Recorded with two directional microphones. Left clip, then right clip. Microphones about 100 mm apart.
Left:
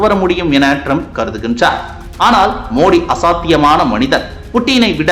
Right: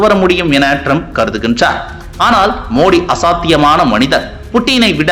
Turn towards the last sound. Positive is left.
turn(degrees=-30)  # may be behind; listen again after turning